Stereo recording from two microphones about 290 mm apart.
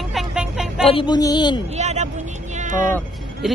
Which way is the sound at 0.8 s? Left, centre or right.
Centre.